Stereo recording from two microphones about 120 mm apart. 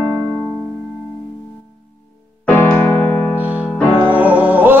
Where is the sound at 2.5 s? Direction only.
15° left (ahead or behind).